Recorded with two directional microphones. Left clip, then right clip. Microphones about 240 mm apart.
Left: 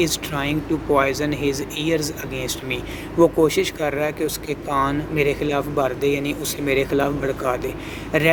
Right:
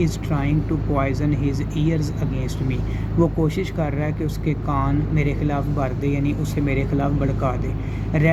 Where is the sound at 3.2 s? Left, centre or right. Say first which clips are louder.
Left 6 dB; left.